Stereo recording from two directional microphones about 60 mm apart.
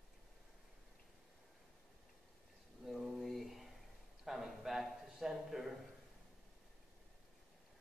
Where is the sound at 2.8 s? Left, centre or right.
Centre.